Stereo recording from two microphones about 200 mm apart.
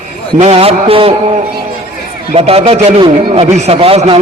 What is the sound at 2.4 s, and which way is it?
A man's voice, 30° right (ahead or behind).